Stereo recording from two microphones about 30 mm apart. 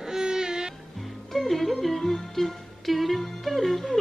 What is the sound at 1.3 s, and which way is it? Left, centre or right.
Music, centre.